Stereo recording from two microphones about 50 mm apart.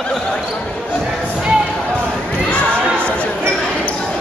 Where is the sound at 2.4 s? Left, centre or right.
Left.